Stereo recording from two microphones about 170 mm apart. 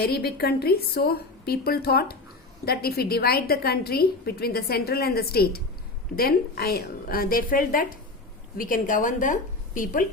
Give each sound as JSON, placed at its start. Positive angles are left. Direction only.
{"t": 0.0, "sound": "a woman's voice", "side_deg": 70}